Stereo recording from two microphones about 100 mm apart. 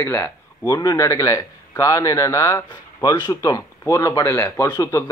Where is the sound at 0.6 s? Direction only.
40° left (ahead or behind).